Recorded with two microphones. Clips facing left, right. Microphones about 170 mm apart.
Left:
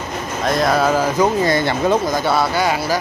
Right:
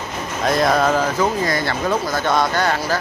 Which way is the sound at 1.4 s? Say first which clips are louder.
Left 4 dB; 25° left (ahead or behind).